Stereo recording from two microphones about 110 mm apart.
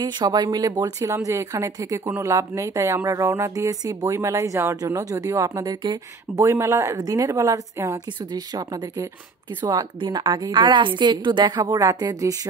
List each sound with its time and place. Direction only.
0.0 s speech: 40° right (ahead or behind)
5.6 s speech: 40° right (ahead or behind)